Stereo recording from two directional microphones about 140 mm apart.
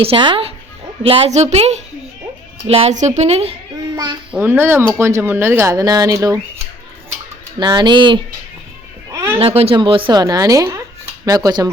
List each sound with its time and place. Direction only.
0.0 s speech: 40° right (ahead or behind)
1.3 s a woman's voice: 55° right (ahead or behind)
3.9 s a child's voice: 30° right (ahead or behind)
4.3 s speech: 15° right (ahead or behind)
7.6 s speech: 35° right (ahead or behind)
9.1 s a sound: 20° right (ahead or behind)
9.4 s a woman's voice: 45° right (ahead or behind); by 11.7 s 25° right (ahead or behind)